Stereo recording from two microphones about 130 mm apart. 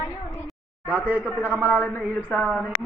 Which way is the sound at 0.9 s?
10° right (ahead or behind).